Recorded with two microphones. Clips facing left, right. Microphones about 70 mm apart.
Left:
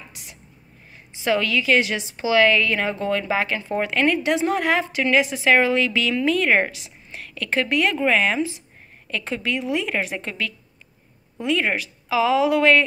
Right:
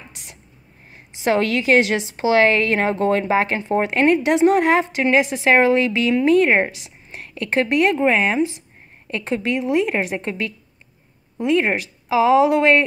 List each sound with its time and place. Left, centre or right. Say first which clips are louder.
1.2 s a woman's voice: right 3 dB; right
4.2 s a woman's voice: right 6 dB; right